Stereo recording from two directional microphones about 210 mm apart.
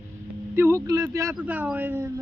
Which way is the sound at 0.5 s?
10° right (ahead or behind).